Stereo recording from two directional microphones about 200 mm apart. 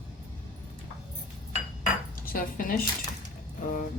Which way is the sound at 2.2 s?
45° left (ahead or behind).